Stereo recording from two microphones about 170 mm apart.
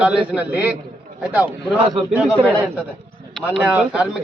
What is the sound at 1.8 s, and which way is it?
Speech, 30° right (ahead or behind).